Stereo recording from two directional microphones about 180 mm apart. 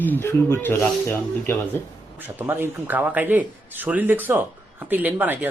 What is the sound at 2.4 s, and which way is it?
A man's voice, 10° right (ahead or behind).